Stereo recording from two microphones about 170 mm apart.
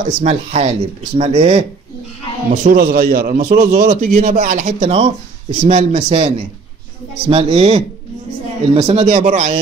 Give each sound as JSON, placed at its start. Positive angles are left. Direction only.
{"t": 0.2, "sound": "speech", "side_deg": -40}
{"t": 2.5, "sound": "a man's voice", "side_deg": -60}